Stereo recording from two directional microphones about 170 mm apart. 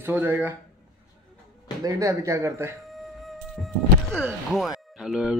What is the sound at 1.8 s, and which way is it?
Speech, 20° right (ahead or behind).